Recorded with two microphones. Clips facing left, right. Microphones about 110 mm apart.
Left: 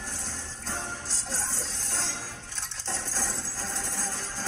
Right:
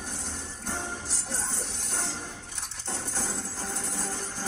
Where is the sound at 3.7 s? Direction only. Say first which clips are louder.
Left 1 dB; 75° left (ahead or behind).